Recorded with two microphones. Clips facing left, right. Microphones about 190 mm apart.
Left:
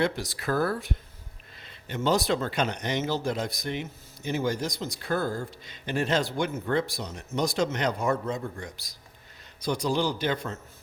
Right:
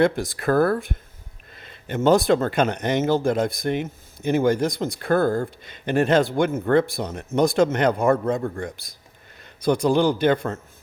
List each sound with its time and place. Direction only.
0.0 s a man's voice: 50° right (ahead or behind)